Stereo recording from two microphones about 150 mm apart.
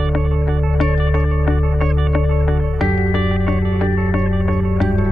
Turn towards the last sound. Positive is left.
turn(degrees=0)  # may be behind; listen again after turning